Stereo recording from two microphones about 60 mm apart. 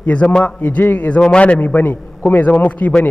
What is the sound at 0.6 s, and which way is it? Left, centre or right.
Speech, left.